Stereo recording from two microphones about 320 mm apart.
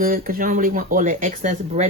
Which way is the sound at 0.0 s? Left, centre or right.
Right.